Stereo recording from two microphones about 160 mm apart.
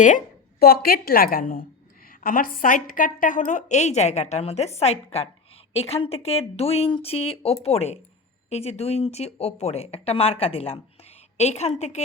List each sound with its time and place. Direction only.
0.6 s a woman's voice: 70° left (ahead or behind); by 12.0 s 45° left (ahead or behind)